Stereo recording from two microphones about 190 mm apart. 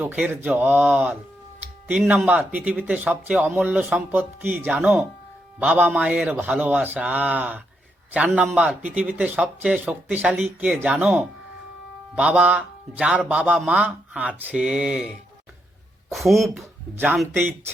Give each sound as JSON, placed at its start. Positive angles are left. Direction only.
{"t": 0.0, "sound": "speech", "side_deg": -10}
{"t": 16.1, "sound": "speech", "side_deg": 0}